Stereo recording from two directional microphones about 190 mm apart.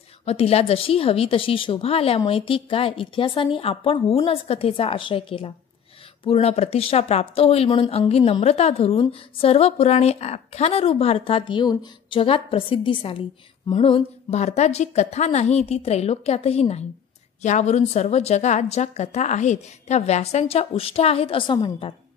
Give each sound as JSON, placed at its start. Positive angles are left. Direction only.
{"t": 0.2, "sound": "a woman's voice", "side_deg": 30}